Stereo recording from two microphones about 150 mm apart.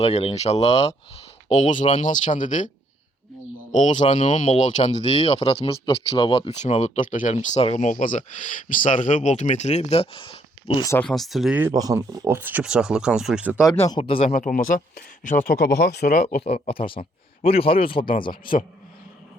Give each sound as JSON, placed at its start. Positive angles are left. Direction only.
{"t": 0.0, "sound": "speech", "side_deg": 45}
{"t": 3.7, "sound": "speech", "side_deg": 55}
{"t": 4.1, "sound": "speech", "side_deg": 35}
{"t": 4.4, "sound": "speech", "side_deg": 55}
{"t": 7.3, "sound": "speech", "side_deg": 45}
{"t": 11.0, "sound": "speech", "side_deg": 0}
{"t": 11.6, "sound": "speech", "side_deg": -25}
{"t": 13.7, "sound": "speech", "side_deg": 25}
{"t": 14.0, "sound": "speech", "side_deg": 40}
{"t": 14.3, "sound": "speech", "side_deg": 65}
{"t": 16.2, "sound": "speech", "side_deg": 40}